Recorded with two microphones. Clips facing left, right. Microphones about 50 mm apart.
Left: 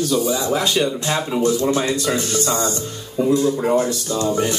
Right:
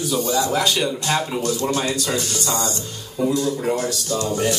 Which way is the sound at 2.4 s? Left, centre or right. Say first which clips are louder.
Left 3 dB; left.